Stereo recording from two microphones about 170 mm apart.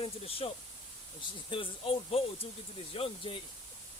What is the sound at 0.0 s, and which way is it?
Speech, 35° left (ahead or behind).